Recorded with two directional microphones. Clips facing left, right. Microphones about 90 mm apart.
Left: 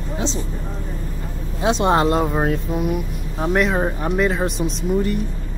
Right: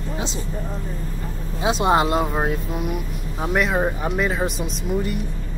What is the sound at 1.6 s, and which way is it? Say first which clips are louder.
Speech: left 2 dB; 5° right (ahead or behind).